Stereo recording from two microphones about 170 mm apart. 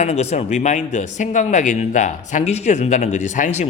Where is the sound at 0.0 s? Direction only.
40° left (ahead or behind).